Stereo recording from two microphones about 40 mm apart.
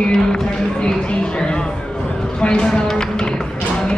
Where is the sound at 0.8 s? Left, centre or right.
Left.